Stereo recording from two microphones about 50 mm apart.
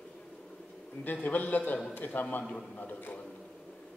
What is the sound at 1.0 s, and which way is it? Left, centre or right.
A man's voice, left.